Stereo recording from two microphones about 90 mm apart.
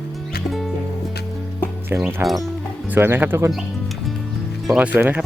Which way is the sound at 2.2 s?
25° right (ahead or behind).